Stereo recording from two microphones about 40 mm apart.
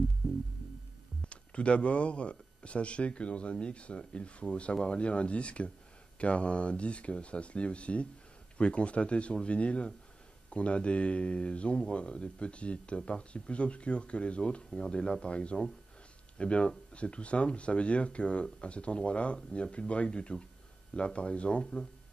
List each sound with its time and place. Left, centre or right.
1.2 s speech: left